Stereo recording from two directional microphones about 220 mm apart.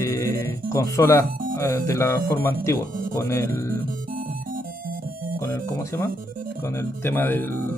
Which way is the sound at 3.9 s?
40° right (ahead or behind).